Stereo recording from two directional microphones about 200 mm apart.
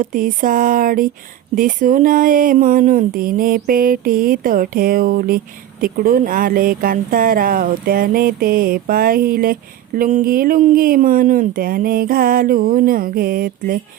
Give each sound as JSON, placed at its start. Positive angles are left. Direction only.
{"t": 0.0, "sound": "speech", "side_deg": -45}